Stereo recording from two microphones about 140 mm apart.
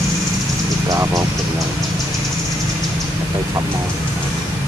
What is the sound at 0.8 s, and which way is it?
Vehicle, 25° right (ahead or behind).